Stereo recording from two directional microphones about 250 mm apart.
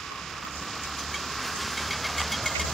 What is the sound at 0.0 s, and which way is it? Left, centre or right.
Vehicle, centre.